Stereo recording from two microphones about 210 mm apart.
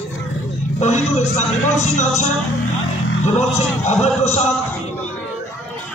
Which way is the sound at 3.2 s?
35° left (ahead or behind).